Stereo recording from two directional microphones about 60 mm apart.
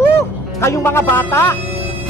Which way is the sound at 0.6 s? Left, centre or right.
Left.